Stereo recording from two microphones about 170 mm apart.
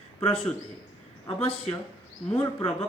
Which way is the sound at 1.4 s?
35° left (ahead or behind).